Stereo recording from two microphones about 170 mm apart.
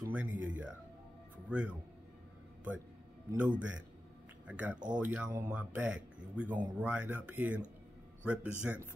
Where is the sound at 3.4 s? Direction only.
10° right (ahead or behind).